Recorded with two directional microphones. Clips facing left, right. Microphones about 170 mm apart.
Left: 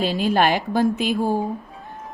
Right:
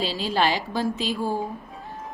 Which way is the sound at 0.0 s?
55° left (ahead or behind).